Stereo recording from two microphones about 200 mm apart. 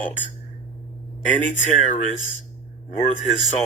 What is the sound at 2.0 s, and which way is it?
Speech, 35° right (ahead or behind).